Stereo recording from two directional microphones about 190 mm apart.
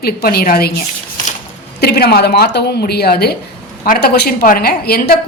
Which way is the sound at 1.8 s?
55° left (ahead or behind).